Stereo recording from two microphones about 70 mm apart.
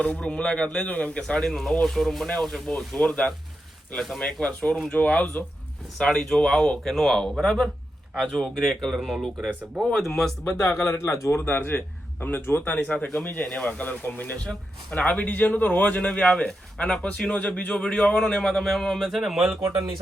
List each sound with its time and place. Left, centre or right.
0.0 s a man's voice: centre
10.4 s a man's voice: left
13.4 s a man's voice: centre